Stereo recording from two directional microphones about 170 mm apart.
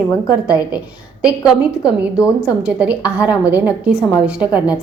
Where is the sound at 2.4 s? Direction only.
5° right (ahead or behind).